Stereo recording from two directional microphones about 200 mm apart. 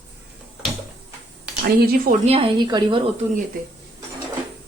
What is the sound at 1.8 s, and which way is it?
Speech, 50° right (ahead or behind).